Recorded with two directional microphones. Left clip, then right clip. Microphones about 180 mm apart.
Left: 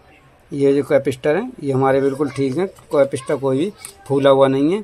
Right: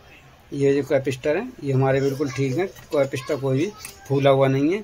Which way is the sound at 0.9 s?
35° left (ahead or behind).